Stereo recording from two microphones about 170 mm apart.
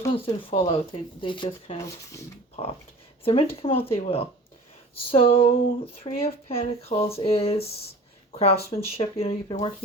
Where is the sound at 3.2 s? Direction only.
35° left (ahead or behind).